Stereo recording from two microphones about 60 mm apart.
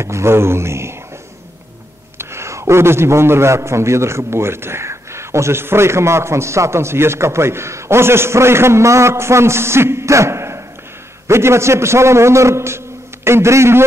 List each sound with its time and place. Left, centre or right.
0.0 s a man's voice: right
2.1 s a man's voice: right